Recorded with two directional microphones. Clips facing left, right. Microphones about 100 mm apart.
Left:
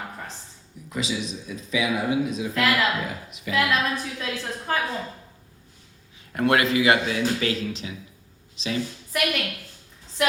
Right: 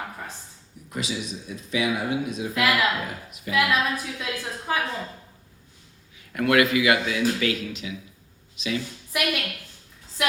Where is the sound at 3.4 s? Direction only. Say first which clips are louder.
Left 1 dB; 90° left.